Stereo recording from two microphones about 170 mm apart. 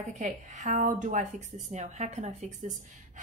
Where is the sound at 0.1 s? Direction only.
45° right (ahead or behind).